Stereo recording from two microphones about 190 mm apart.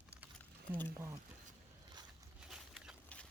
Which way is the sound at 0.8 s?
15° right (ahead or behind).